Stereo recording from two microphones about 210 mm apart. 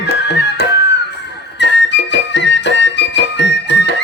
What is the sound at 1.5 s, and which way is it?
Music, 55° left (ahead or behind).